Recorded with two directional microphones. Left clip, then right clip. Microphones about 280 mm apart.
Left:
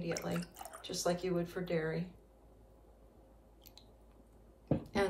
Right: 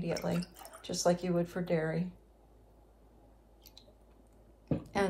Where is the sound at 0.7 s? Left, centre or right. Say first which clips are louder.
Right 5 dB; centre.